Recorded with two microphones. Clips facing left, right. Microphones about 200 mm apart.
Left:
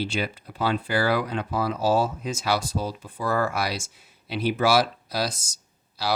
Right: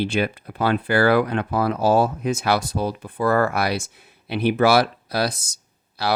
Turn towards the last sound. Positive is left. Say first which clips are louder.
# right 4 dB
turn(degrees=-60)  # may be behind; listen again after turning